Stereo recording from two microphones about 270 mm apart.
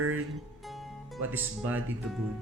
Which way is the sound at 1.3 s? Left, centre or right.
Centre.